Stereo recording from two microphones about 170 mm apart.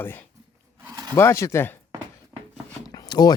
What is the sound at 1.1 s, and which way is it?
Speech, 15° left (ahead or behind).